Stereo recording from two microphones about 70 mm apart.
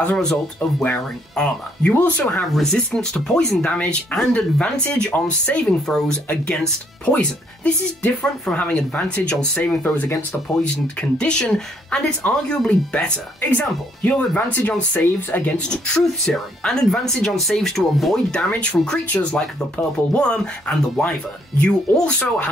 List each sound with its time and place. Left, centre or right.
0.1 s speech: centre
0.6 s speech: left
2.0 s speech: left
2.5 s speech: centre
5.9 s speech: centre
13.4 s speech: left; by 18.2 s centre
18.5 s speech: centre